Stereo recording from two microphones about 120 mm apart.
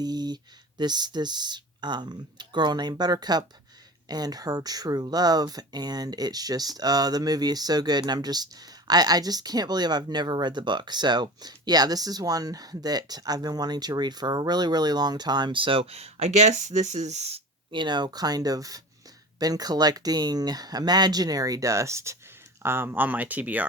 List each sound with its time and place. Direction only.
0.0 s a sound: 35° right (ahead or behind)
0.8 s speech: 35° right (ahead or behind); by 17.7 s 60° right (ahead or behind)
17.7 s speech: 40° right (ahead or behind); by 23.6 s 15° right (ahead or behind)